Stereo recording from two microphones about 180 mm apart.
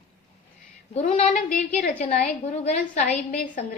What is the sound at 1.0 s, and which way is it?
A woman's voice, 45° left (ahead or behind).